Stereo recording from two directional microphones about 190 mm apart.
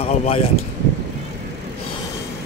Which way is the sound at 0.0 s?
35° left (ahead or behind).